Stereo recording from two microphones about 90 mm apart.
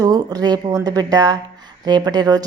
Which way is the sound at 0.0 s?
45° right (ahead or behind).